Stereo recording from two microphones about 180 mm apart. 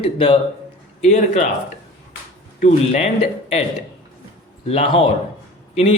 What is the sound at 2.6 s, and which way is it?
Speech, 40° left (ahead or behind).